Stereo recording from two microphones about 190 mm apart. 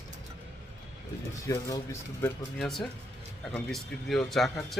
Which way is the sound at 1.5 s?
15° left (ahead or behind).